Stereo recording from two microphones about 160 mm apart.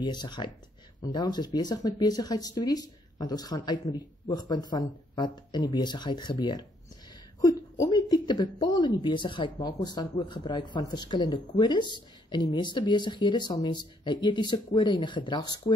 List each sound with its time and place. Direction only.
0.0 s a woman's voice: 25° left (ahead or behind)